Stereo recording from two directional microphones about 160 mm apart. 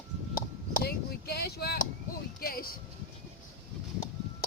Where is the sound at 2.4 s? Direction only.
65° left (ahead or behind).